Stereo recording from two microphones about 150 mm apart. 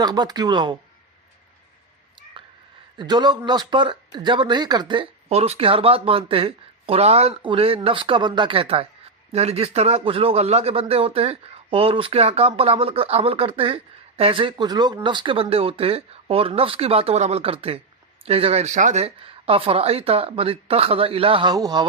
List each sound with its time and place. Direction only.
0.0 s speech: 25° right (ahead or behind)
2.4 s a sound: 35° right (ahead or behind)
3.0 s speech: 30° right (ahead or behind)